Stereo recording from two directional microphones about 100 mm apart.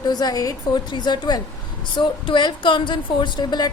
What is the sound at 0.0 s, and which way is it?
A woman's voice, 40° left (ahead or behind).